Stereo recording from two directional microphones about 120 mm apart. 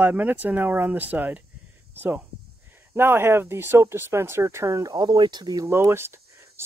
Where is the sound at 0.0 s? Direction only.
15° right (ahead or behind).